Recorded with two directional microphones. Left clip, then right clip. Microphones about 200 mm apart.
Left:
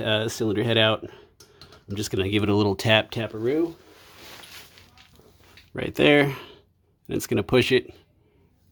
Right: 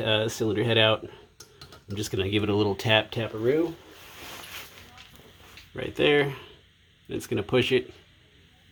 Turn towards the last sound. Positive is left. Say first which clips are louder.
# left 3 dB
turn(degrees=45)  # may be behind; listen again after turning